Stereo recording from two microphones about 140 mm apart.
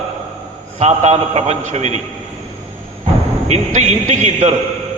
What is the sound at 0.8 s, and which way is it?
A man's voice, 55° right (ahead or behind).